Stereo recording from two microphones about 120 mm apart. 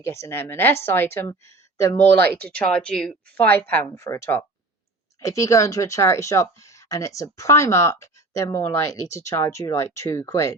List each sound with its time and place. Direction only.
0.0 s speech: 20° left (ahead or behind)